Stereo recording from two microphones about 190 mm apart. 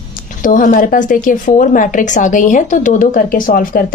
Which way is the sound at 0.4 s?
45° left (ahead or behind).